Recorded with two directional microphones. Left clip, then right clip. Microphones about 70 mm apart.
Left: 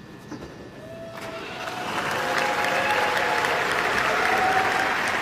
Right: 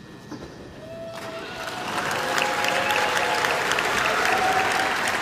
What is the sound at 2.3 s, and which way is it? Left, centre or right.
Applause, right.